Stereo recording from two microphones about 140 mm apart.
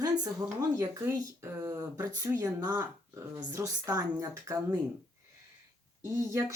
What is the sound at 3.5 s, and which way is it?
Speech, 25° right (ahead or behind).